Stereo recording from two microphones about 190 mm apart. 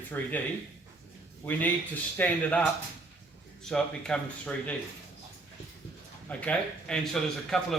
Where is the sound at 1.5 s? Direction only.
10° left (ahead or behind).